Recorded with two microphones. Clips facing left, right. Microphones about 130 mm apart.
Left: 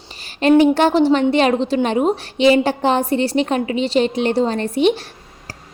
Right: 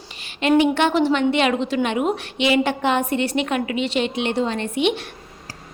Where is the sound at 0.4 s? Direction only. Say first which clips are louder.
Left 5 dB; 35° left (ahead or behind).